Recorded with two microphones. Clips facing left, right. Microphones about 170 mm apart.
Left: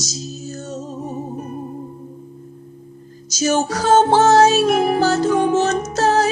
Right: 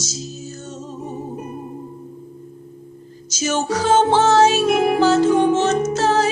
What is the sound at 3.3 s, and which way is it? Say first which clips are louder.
Music: left 3 dB; 40° left (ahead or behind).